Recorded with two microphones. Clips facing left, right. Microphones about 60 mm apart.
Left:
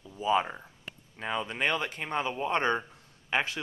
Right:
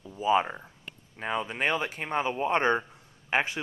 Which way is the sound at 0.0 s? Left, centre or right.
Centre.